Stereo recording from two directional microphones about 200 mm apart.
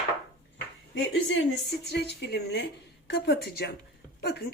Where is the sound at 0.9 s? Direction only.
60° left (ahead or behind).